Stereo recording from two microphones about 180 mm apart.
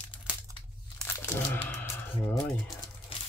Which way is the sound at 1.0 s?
10° left (ahead or behind).